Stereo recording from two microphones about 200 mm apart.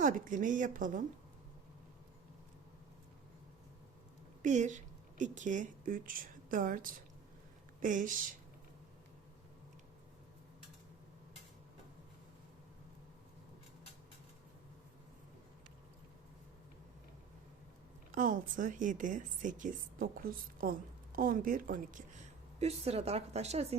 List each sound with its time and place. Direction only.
0.0 s a woman's voice: 40° right (ahead or behind)
4.4 s a woman's voice: 35° right (ahead or behind)
18.1 s a woman's voice: 40° right (ahead or behind)
22.6 s a woman's voice: 30° right (ahead or behind)